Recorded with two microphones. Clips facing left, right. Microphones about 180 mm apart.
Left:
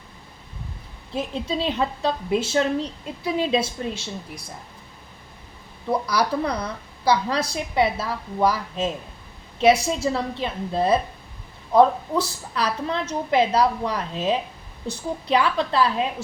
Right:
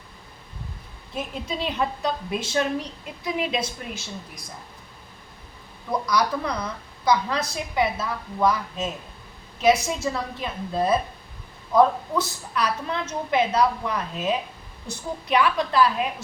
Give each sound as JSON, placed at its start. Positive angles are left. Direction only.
{"t": 1.1, "sound": "a woman's voice", "side_deg": 30}
{"t": 5.9, "sound": "a woman's voice", "side_deg": 30}